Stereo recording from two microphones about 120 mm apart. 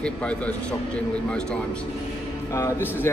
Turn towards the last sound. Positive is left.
turn(degrees=20)  # may be behind; listen again after turning